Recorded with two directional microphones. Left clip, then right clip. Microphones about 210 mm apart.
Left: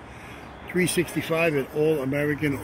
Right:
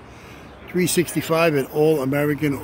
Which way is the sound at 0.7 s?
20° right (ahead or behind).